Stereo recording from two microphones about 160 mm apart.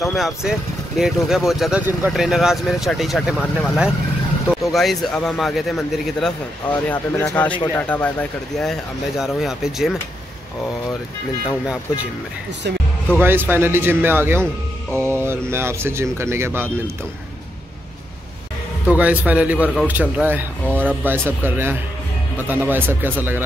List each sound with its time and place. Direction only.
0.0 s speech: centre (ahead or behind)
6.9 s speech: 15° left (ahead or behind); by 9.9 s centre (ahead or behind)
13.2 s speech: 10° right (ahead or behind)
18.9 s speech: 10° right (ahead or behind)